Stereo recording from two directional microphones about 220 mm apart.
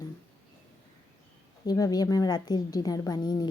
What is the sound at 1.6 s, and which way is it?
Speech, 15° left (ahead or behind).